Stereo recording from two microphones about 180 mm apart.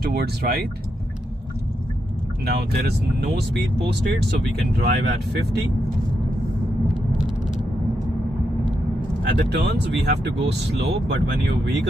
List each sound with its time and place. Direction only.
0.0 s speech: 60° right (ahead or behind)
2.4 s speech: 65° right (ahead or behind)
6.9 s vehicle: 5° right (ahead or behind)
9.2 s speech: 70° right (ahead or behind)